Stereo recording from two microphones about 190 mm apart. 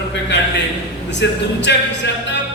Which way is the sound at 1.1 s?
65° left (ahead or behind).